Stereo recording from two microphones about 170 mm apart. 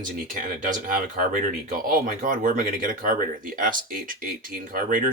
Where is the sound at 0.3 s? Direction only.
50° right (ahead or behind).